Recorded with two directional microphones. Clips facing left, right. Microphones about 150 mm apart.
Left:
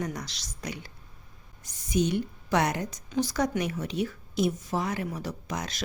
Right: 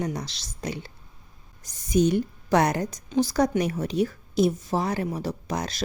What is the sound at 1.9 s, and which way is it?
A woman's voice, 40° right (ahead or behind).